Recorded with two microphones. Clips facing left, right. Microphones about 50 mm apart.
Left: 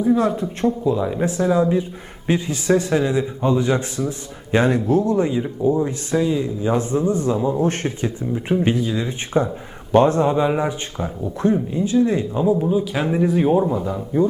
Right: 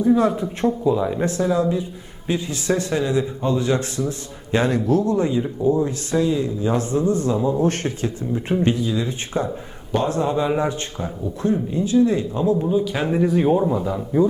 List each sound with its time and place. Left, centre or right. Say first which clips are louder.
0.0 s speech: right 1 dB; centre
1.7 s speech: left 4 dB; left
2.6 s speech: left 3 dB; centre
4.5 s speech: left 2 dB; left
8.3 s speech: left 2 dB; centre
8.7 s speech: left 1 dB; left
9.9 s speech: left 6 dB; left
10.2 s speech: left 2 dB; centre
11.4 s speech: left 2 dB; left
12.3 s speech: left 1 dB; centre